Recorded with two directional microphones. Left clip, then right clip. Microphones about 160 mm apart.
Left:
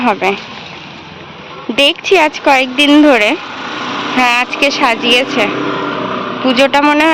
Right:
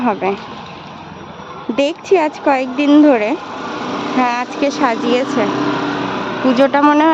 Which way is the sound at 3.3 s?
70° right (ahead or behind).